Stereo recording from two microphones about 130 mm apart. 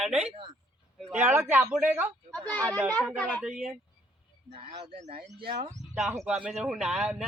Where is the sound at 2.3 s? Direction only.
10° left (ahead or behind).